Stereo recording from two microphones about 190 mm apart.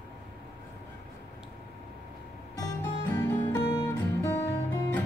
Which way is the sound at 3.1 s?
15° left (ahead or behind).